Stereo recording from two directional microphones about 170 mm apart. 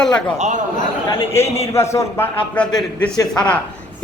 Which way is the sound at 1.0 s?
30° left (ahead or behind).